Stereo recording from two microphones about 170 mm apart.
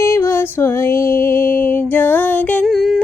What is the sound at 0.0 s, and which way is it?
Music, 15° left (ahead or behind).